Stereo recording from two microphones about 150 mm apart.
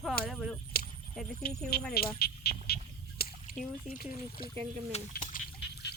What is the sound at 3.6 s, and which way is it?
Speech, 5° left (ahead or behind).